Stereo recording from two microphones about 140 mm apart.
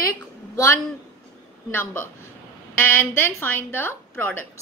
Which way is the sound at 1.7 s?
15° left (ahead or behind).